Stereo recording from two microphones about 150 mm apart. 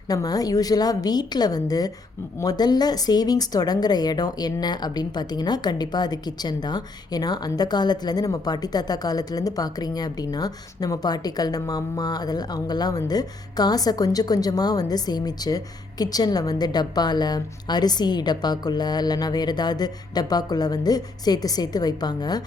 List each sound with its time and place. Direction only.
0.1 s speech: 25° left (ahead or behind)